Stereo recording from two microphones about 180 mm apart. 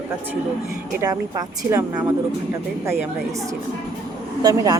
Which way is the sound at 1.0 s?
20° right (ahead or behind).